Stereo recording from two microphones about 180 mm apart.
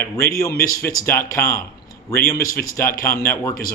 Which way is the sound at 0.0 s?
15° left (ahead or behind).